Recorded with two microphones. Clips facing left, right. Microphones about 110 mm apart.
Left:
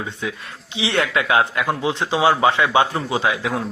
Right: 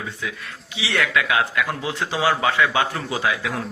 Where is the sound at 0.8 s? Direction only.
30° left (ahead or behind).